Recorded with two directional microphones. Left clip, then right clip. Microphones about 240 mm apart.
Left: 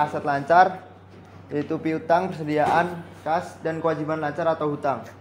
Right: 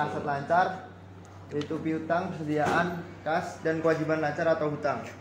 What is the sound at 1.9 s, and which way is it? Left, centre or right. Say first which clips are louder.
A man's voice: left 8 dB; left.